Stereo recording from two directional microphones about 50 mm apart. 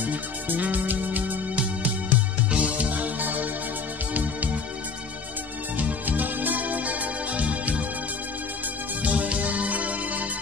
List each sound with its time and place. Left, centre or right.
0.0 s music: right
1.5 s music: right
5.8 s music: right
9.0 s music: right